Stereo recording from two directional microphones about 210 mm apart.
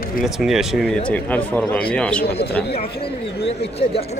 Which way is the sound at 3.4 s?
30° left (ahead or behind).